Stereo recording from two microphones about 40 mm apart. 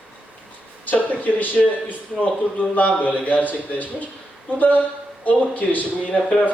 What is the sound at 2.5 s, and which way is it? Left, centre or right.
A man's voice, left.